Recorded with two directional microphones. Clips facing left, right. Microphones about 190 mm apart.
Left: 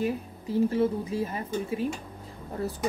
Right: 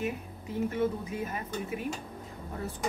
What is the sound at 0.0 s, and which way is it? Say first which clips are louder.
Speech: left 5 dB; 30° left (ahead or behind).